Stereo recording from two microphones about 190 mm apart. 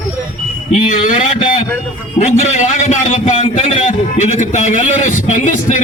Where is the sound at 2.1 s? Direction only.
35° left (ahead or behind).